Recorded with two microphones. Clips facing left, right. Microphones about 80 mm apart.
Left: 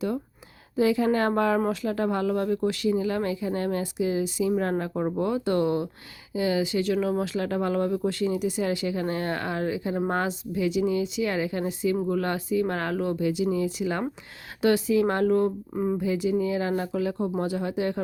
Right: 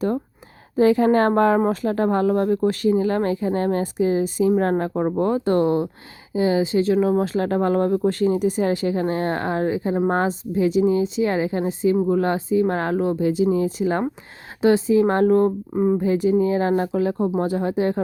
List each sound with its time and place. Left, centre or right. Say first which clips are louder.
0.8 s speech: right 6 dB; right
15.7 s speech: right 7 dB; right
16.0 s speech: right 6 dB; right